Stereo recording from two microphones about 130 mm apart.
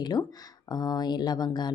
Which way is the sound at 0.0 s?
30° left (ahead or behind).